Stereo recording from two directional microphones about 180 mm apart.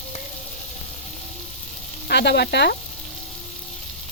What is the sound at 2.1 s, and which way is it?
Speech, 70° left (ahead or behind).